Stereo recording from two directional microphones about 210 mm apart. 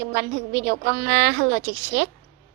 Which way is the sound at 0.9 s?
55° right (ahead or behind).